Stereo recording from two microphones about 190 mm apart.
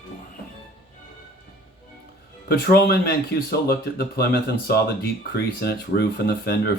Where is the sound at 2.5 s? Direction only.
55° left (ahead or behind).